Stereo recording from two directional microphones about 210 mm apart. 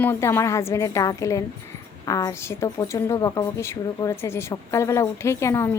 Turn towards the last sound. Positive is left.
turn(degrees=10)  # may be behind; listen again after turning